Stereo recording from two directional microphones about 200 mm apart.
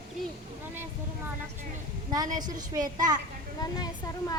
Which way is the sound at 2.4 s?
20° right (ahead or behind).